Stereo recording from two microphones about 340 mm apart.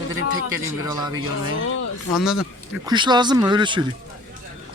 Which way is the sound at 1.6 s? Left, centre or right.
Left.